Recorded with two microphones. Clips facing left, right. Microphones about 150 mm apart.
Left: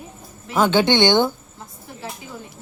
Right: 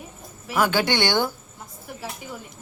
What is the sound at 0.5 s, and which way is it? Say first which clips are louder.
Speech: left 5 dB; 25° left (ahead or behind).